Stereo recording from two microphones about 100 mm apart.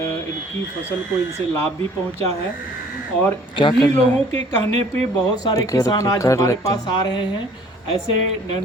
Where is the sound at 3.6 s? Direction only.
50° left (ahead or behind).